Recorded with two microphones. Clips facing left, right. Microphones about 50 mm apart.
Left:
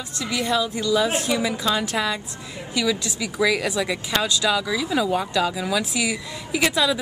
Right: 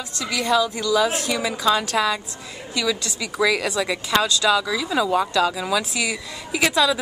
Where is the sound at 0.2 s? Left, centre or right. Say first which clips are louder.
Right 3 dB; left.